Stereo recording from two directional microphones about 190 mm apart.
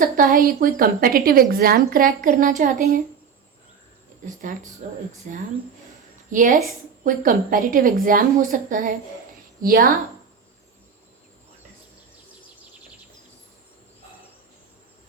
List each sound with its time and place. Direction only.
0.0 s a woman's voice: 45° right (ahead or behind)
4.8 s a woman's voice: 45° right (ahead or behind)